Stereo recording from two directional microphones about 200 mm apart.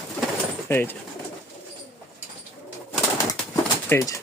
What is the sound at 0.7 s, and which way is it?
Speech, 10° left (ahead or behind).